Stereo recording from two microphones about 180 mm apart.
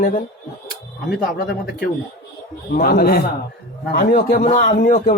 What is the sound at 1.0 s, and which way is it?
Speech, 60° left (ahead or behind).